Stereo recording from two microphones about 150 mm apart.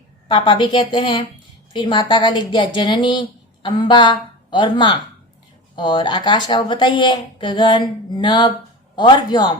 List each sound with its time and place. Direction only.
0.3 s a man's voice: 30° left (ahead or behind)